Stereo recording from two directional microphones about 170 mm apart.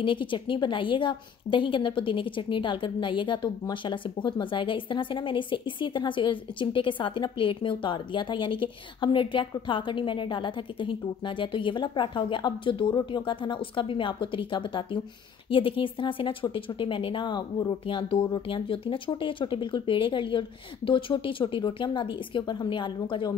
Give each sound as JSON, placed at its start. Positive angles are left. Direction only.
{"t": 0.0, "sound": "a woman's voice", "side_deg": 30}